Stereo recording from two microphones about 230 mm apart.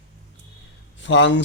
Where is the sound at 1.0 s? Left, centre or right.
Left.